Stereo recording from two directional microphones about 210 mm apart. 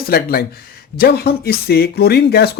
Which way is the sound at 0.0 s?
45° left (ahead or behind).